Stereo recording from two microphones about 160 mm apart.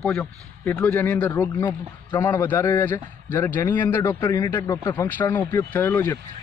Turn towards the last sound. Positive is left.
turn(degrees=15)  # may be behind; listen again after turning